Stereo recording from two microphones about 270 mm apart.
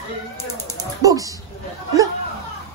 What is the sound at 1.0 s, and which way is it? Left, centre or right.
Speech, centre.